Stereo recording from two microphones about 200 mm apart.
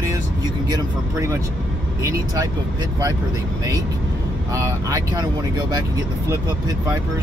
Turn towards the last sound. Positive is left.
turn(degrees=-20)  # may be behind; listen again after turning